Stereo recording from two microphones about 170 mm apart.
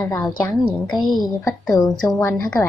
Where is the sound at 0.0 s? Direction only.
15° left (ahead or behind).